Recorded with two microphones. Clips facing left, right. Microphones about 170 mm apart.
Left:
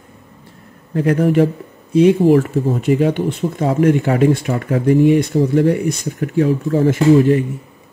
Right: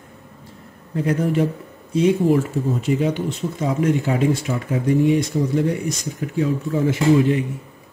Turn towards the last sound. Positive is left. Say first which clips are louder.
# left 5 dB
turn(degrees=50)  # may be behind; listen again after turning